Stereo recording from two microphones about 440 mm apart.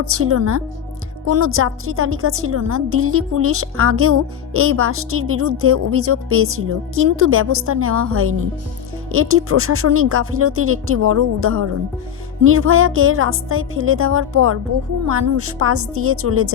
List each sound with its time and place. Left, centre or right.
0.0 s a woman's voice: right